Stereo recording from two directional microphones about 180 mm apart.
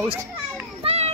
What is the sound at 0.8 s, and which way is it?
Children playing, 35° right (ahead or behind).